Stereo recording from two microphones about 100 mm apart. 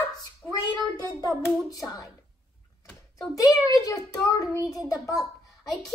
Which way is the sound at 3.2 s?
35° left (ahead or behind).